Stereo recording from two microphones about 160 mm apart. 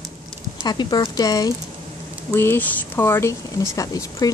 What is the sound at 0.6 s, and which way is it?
A woman's voice, 25° left (ahead or behind).